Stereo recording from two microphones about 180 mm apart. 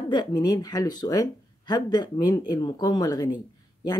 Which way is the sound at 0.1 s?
25° left (ahead or behind).